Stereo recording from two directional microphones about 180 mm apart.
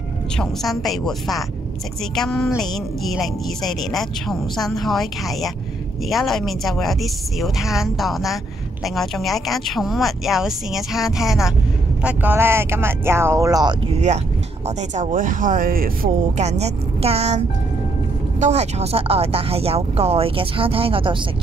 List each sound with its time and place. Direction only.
0.4 s speech: centre (ahead or behind); by 13.7 s 20° right (ahead or behind)
14.8 s speech: 45° right (ahead or behind)
16.3 s speech: 35° right (ahead or behind)
18.4 s speech: 35° right (ahead or behind)